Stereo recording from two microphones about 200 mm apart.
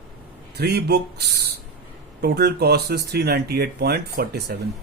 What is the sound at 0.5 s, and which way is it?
Speech, 55° right (ahead or behind).